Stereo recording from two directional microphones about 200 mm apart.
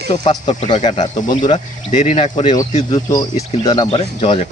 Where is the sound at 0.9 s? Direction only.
35° left (ahead or behind).